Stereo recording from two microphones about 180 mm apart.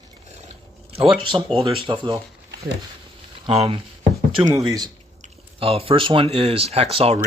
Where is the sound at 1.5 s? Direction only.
30° right (ahead or behind).